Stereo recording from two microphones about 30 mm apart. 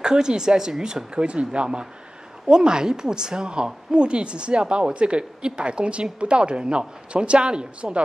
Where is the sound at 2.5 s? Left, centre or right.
Right.